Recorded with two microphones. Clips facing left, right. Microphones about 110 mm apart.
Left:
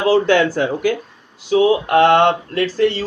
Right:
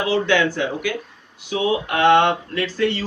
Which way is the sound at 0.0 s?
35° left (ahead or behind).